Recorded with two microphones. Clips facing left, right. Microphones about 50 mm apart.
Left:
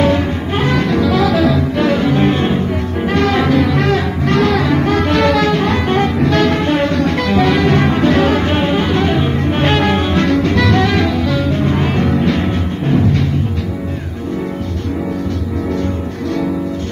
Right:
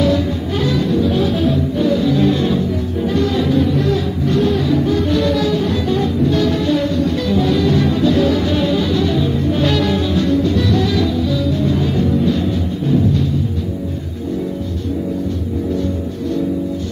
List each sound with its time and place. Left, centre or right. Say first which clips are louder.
0.0 s music: left 2 dB; left
0.8 s music: left 2 dB; left
3.1 s music: left 4 dB; left
10.2 s music: left 3 dB; left